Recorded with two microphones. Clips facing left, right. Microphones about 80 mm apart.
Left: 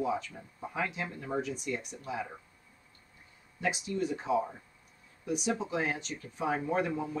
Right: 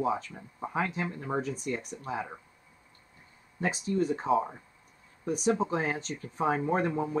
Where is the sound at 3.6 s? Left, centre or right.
Right.